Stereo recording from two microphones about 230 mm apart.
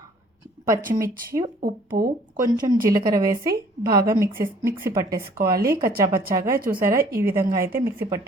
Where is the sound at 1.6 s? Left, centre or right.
Right.